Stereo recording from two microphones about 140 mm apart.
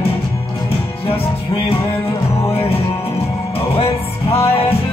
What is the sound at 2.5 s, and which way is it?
Music, 40° left (ahead or behind).